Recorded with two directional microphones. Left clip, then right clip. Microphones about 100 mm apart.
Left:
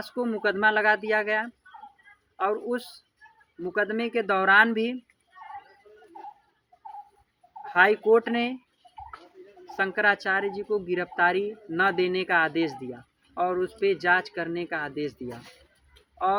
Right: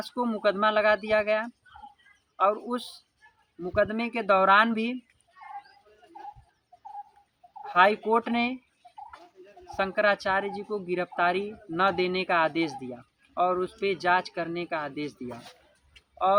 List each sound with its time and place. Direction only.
0.4 s a woman's voice: 20° right (ahead or behind)
7.6 s a woman's voice: 25° right (ahead or behind)
9.6 s a woman's voice: 20° right (ahead or behind)
16.1 s speech: 15° right (ahead or behind)